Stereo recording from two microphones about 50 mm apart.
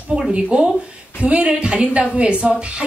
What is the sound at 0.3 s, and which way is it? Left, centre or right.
A woman's voice, centre.